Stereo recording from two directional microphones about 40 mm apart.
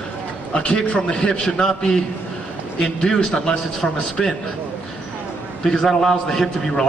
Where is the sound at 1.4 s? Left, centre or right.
Centre.